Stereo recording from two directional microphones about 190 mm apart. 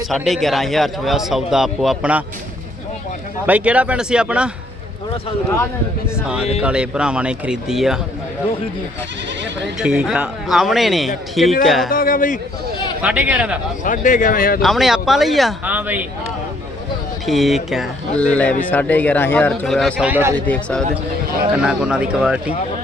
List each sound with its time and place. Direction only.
0.1 s a man's voice: centre (ahead or behind)
3.4 s speech: 5° right (ahead or behind)
6.6 s a man's voice: 5° right (ahead or behind)
9.7 s a man's voice: 5° right (ahead or behind)
11.9 s speech: 45° left (ahead or behind)
13.0 s speech: 10° right (ahead or behind)
13.8 s speech: 45° left (ahead or behind)
14.6 s a man's voice: centre (ahead or behind)
17.2 s a man's voice: centre (ahead or behind)
20.5 s a man's voice: 5° left (ahead or behind)